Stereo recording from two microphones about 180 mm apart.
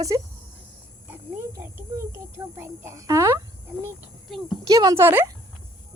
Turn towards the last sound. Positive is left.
turn(degrees=-10)  # may be behind; listen again after turning